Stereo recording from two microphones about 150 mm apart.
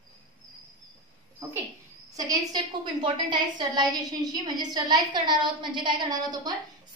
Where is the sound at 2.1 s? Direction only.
25° right (ahead or behind).